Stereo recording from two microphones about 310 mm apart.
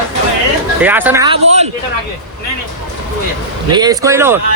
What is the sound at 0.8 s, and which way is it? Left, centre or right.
Speech, centre.